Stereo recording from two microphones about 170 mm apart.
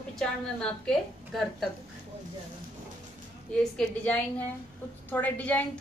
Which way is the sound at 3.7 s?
10° left (ahead or behind).